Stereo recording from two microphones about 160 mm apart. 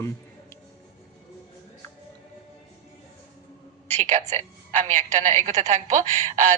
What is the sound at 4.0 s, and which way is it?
A woman's voice, 45° right (ahead or behind).